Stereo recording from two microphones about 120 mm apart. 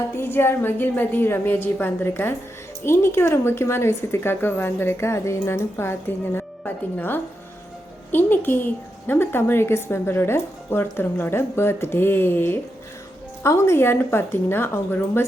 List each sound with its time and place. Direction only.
0.2 s a woman's voice: 20° left (ahead or behind)